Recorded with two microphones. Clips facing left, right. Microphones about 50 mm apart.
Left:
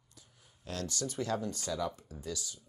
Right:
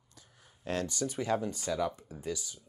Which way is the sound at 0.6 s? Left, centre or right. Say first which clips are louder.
Right 6 dB; right.